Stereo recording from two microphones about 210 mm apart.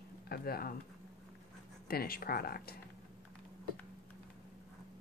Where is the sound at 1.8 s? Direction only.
45° left (ahead or behind).